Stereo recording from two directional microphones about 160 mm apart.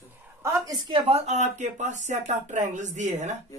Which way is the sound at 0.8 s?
35° right (ahead or behind).